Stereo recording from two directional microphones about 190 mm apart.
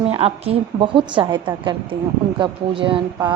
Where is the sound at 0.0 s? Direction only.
30° right (ahead or behind).